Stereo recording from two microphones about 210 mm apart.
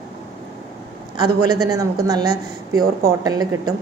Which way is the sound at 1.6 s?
15° right (ahead or behind).